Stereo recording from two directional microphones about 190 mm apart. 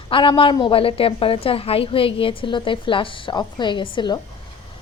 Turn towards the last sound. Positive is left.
turn(degrees=25)  # may be behind; listen again after turning